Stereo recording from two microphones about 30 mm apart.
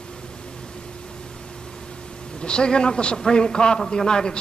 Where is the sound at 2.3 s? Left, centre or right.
Left.